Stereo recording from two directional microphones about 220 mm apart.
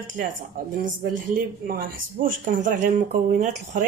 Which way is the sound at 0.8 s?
35° right (ahead or behind).